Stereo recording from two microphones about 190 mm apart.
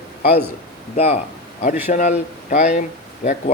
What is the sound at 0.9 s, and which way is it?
Speech, 35° left (ahead or behind).